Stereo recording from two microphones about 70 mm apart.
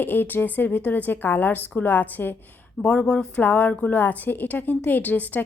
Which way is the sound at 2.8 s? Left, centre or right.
Centre.